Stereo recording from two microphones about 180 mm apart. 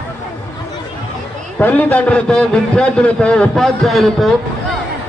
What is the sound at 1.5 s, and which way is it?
A man's voice, 10° left (ahead or behind).